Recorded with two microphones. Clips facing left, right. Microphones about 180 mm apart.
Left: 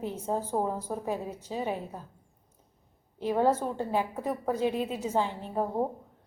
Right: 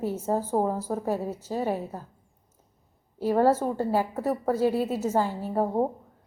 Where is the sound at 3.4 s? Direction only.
10° right (ahead or behind).